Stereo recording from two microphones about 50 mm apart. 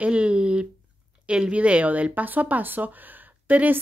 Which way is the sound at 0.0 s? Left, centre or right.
Right.